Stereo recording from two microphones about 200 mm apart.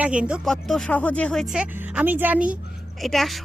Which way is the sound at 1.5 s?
5° right (ahead or behind).